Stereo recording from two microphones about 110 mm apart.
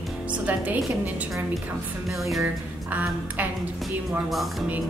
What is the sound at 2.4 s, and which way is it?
Speech, 15° right (ahead or behind).